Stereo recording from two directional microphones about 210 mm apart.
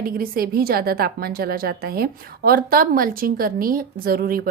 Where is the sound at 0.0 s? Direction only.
45° right (ahead or behind).